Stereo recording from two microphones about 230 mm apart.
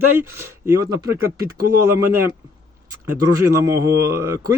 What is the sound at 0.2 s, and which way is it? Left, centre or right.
A man's voice, centre.